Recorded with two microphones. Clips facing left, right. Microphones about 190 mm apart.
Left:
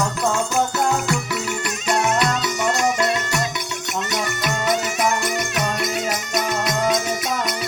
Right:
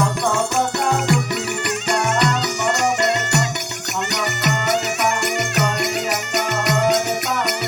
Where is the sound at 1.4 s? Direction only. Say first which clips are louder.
Right 2 dB; 65° right (ahead or behind).